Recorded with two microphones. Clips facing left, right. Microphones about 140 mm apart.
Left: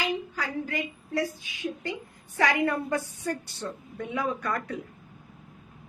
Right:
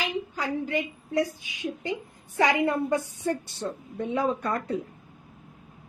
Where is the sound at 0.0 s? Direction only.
20° right (ahead or behind).